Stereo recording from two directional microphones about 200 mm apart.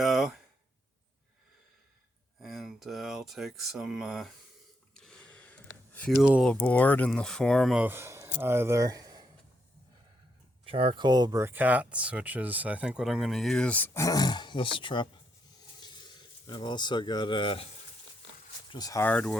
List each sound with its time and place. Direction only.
0.0 s speech: centre (ahead or behind)
2.4 s speech: centre (ahead or behind)
4.9 s a sound: 5° left (ahead or behind)
6.2 s speech: 5° right (ahead or behind)
6.5 s speech: 10° left (ahead or behind); by 9.2 s 20° right (ahead or behind)
10.7 s speech: 25° right (ahead or behind); by 17.7 s 25° left (ahead or behind)
18.7 s speech: 20° left (ahead or behind)